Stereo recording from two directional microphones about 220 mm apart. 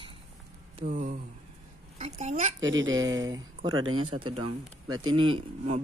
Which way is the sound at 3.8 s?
70° right (ahead or behind).